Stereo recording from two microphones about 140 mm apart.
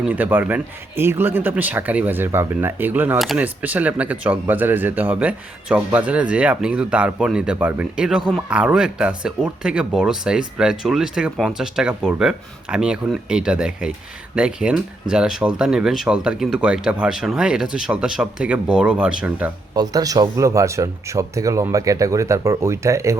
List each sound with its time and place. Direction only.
0.1 s speech: 15° right (ahead or behind)
19.7 s speech: 25° right (ahead or behind)